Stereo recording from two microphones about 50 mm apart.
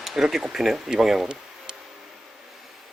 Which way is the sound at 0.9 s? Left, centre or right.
Centre.